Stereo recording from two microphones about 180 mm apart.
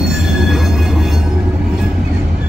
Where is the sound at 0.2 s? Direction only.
Centre (ahead or behind).